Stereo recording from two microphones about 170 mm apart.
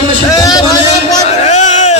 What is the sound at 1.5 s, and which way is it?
Crowd, 45° left (ahead or behind).